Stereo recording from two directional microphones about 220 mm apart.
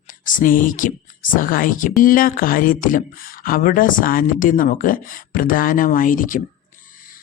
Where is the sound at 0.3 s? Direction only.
40° left (ahead or behind).